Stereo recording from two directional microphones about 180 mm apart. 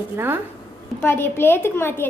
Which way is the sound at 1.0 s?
10° left (ahead or behind).